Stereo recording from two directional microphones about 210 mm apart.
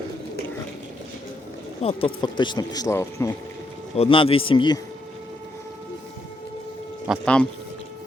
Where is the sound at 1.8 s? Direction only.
25° left (ahead or behind).